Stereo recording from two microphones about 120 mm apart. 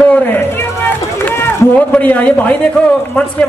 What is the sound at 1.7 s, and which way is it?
Speech, 10° left (ahead or behind).